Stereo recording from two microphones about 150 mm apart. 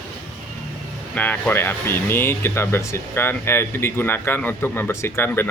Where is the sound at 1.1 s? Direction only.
10° left (ahead or behind).